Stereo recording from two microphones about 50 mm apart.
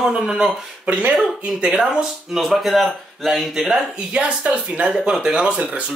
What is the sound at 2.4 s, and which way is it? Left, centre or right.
Speech, centre.